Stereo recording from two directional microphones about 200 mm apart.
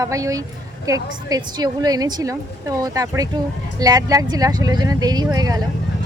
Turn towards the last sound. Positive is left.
turn(degrees=-20)  # may be behind; listen again after turning